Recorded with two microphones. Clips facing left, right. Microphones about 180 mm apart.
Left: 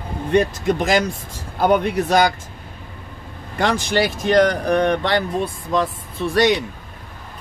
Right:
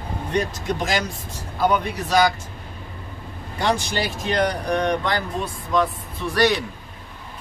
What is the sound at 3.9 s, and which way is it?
Speech, 70° left (ahead or behind).